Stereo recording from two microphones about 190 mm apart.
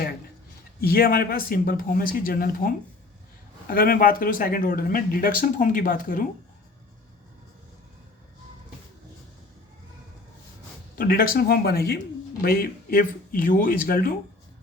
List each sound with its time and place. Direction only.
0.8 s speech: 55° left (ahead or behind)
10.9 s speech: 50° left (ahead or behind)